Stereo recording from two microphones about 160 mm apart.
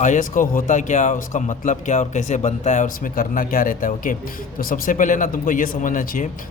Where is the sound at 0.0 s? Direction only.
50° left (ahead or behind).